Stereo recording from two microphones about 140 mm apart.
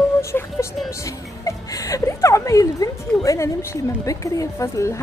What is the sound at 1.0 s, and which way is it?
Speech, 25° left (ahead or behind).